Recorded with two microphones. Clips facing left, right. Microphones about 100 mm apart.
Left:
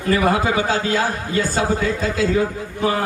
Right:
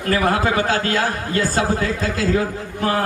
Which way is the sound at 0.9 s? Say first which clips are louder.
Even; centre (ahead or behind).